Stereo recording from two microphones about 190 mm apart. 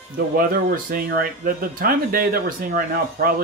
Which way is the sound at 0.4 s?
50° right (ahead or behind).